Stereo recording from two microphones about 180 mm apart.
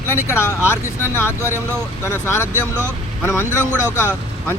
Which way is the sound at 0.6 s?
15° left (ahead or behind).